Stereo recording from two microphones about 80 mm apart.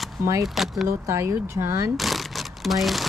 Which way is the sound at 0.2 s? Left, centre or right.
Right.